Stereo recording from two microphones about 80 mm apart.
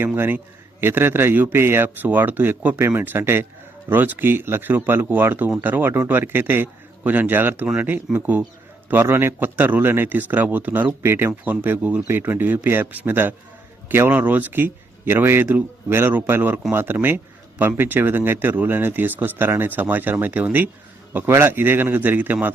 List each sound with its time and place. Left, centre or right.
0.0 s a man's voice: right